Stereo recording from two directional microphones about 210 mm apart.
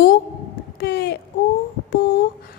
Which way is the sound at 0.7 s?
50° left (ahead or behind).